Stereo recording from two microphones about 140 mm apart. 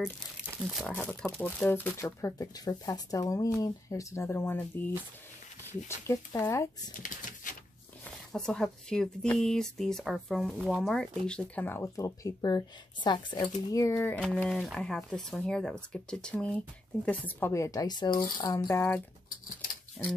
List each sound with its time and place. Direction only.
0.8 s speech: 10° left (ahead or behind)
7.0 s typewriter: 70° left (ahead or behind)
8.3 s speech: 5° left (ahead or behind); by 13.4 s 30° left (ahead or behind)
13.7 s speech: 20° left (ahead or behind)
17.5 s speech: 25° left (ahead or behind)
18.8 s speech: 15° left (ahead or behind)